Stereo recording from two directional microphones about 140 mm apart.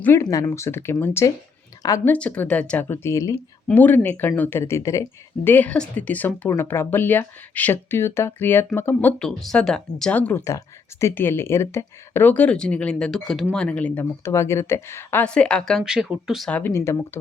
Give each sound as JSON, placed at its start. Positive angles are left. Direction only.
{"t": 0.0, "sound": "speech", "side_deg": 20}
{"t": 2.0, "sound": "speech", "side_deg": 10}
{"t": 2.8, "sound": "speech", "side_deg": 20}
{"t": 5.5, "sound": "speech", "side_deg": 10}
{"t": 16.5, "sound": "speech", "side_deg": 10}